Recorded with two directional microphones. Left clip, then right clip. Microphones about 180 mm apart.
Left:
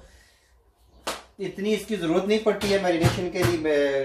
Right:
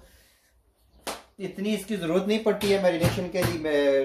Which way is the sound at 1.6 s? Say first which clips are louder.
Left 4 dB; 45° right (ahead or behind).